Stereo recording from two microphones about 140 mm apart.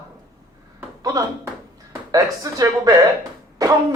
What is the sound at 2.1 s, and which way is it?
Speech, 25° right (ahead or behind).